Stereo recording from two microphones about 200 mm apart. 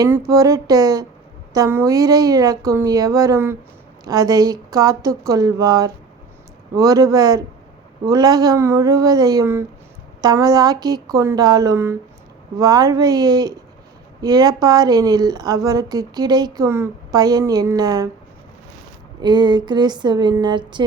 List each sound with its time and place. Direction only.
0.3 s a woman's voice: 15° right (ahead or behind)
19.2 s a woman's voice: 20° right (ahead or behind)